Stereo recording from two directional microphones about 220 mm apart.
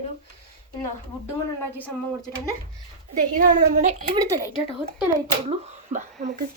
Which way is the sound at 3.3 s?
35° right (ahead or behind).